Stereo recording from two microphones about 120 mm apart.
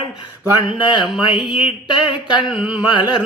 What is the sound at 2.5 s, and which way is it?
Mantra, 10° right (ahead or behind).